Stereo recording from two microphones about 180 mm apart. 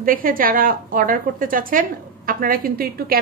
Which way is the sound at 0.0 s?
50° right (ahead or behind).